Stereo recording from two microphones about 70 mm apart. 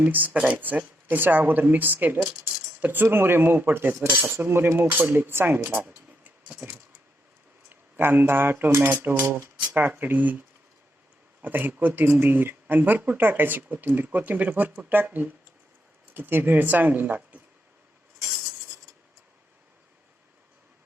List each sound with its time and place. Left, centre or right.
0.0 s speech: right
11.4 s speech: right